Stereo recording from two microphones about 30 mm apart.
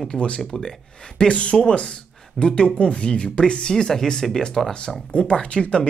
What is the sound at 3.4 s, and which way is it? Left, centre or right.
Speech, left.